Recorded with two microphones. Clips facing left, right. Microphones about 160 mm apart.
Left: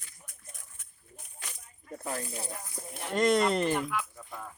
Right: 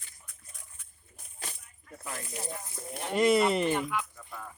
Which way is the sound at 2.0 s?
35° left (ahead or behind).